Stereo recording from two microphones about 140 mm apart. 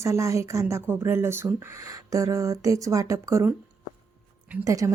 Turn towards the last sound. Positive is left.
turn(degrees=-25)  # may be behind; listen again after turning